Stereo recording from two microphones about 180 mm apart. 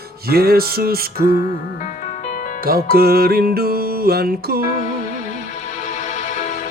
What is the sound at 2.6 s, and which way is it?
Music, 55° right (ahead or behind).